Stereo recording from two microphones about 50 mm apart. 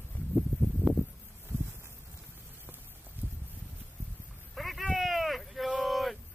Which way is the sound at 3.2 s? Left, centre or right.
Right.